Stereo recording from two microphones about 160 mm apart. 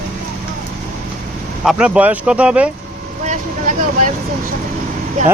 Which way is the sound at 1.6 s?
5° right (ahead or behind).